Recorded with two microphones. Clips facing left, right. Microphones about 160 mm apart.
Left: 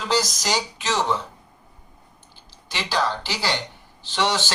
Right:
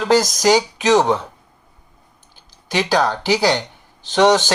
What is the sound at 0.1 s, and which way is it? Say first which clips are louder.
Speech: right 9 dB; 45° right (ahead or behind).